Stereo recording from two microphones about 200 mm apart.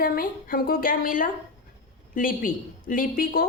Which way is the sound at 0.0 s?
45° left (ahead or behind).